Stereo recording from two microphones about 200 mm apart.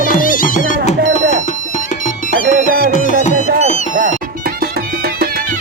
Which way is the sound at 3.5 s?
35° right (ahead or behind).